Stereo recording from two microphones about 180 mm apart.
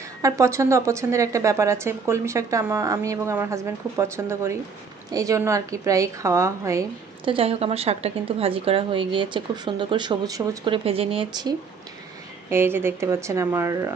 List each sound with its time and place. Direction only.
0.2 s a woman's voice: 15° right (ahead or behind)
7.3 s speech: 30° right (ahead or behind)
10.8 s speech: 30° right (ahead or behind)
12.5 s a woman's voice: 15° right (ahead or behind)